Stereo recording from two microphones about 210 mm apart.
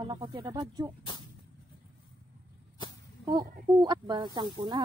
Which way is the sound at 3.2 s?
20° right (ahead or behind).